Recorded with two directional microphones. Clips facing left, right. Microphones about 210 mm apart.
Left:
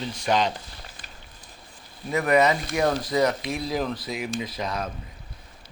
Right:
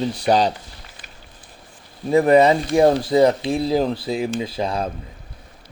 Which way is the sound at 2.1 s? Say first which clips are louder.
Right 7 dB; 30° right (ahead or behind).